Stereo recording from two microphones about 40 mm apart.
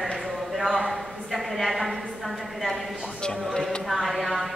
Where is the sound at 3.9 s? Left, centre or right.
Centre.